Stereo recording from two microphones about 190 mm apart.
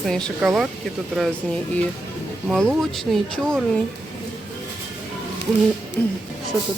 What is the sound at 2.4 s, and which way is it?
Speech, centre (ahead or behind).